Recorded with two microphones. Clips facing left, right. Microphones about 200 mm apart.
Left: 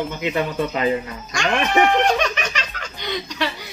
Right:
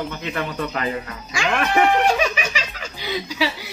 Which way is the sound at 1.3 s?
5° right (ahead or behind).